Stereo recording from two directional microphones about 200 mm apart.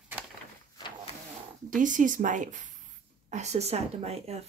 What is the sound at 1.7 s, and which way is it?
Speech, 40° right (ahead or behind).